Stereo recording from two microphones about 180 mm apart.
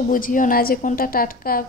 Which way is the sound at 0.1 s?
50° left (ahead or behind).